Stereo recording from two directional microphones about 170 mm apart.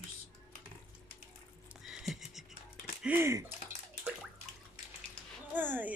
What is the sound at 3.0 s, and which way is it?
Speech, 15° right (ahead or behind).